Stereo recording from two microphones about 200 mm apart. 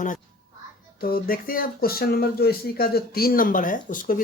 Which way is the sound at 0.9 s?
50° left (ahead or behind).